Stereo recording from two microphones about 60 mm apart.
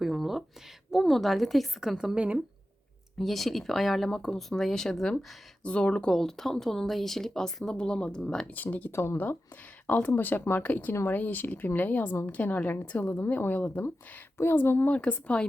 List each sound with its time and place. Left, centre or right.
0.0 s a sound: centre
0.9 s speech: centre
2.1 s speech: right
3.2 s speech: centre
6.1 s speech: centre
8.5 s speech: left
8.9 s speech: left
9.8 s speech: left
10.9 s speech: left
14.9 s speech: left